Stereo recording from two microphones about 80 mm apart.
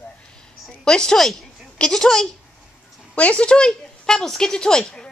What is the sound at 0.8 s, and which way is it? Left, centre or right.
Speech, centre.